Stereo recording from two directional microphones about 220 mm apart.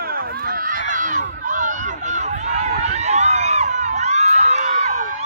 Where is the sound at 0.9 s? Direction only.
35° right (ahead or behind).